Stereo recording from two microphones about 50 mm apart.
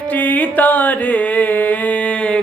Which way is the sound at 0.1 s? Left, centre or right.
Left.